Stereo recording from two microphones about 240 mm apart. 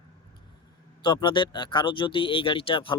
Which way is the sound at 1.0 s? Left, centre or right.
Centre.